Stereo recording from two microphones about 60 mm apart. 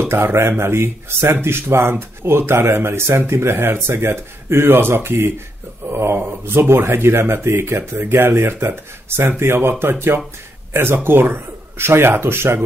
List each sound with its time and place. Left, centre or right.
0.1 s speech: right